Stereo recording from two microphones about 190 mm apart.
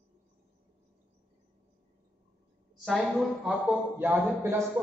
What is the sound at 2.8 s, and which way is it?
A woman's voice, centre (ahead or behind).